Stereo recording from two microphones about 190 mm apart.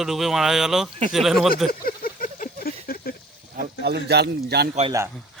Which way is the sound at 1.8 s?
50° left (ahead or behind).